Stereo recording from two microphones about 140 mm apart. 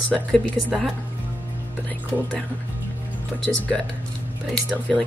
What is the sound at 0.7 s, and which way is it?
Speech, centre (ahead or behind).